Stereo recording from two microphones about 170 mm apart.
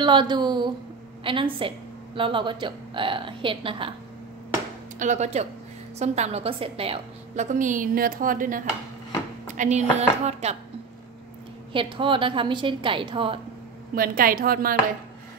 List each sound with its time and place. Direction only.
0.0 s a woman's voice: 25° right (ahead or behind)
4.9 s a woman's voice: 45° right (ahead or behind)
11.7 s a woman's voice: 30° right (ahead or behind)
13.9 s a woman's voice: 55° right (ahead or behind)